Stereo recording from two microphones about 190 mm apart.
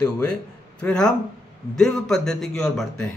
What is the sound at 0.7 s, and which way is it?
A man's voice, 5° left (ahead or behind).